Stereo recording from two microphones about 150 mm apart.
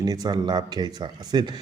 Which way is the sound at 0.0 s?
25° right (ahead or behind).